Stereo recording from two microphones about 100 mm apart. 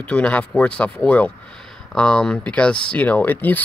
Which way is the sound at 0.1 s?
10° left (ahead or behind).